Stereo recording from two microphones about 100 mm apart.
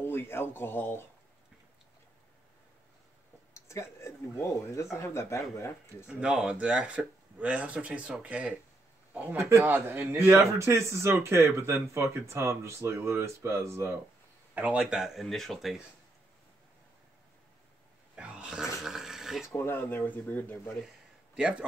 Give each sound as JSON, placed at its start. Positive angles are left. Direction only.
{"t": 0.0, "sound": "speech", "side_deg": 20}
{"t": 3.5, "sound": "speech", "side_deg": 30}
{"t": 6.0, "sound": "speech", "side_deg": -10}
{"t": 14.5, "sound": "speech", "side_deg": -15}
{"t": 18.1, "sound": "a sound", "side_deg": -10}
{"t": 19.4, "sound": "speech", "side_deg": 25}
{"t": 21.4, "sound": "speech", "side_deg": -10}